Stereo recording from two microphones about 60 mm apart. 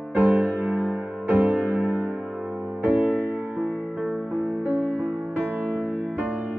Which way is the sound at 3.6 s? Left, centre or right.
Centre.